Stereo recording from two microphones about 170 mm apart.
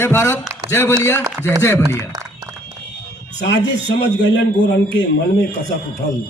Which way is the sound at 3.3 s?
85° left.